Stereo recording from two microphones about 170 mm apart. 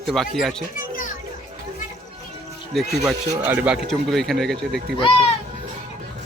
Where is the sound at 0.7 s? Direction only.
55° left (ahead or behind).